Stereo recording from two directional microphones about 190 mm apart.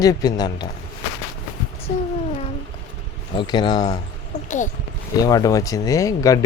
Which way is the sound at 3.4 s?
25° left (ahead or behind).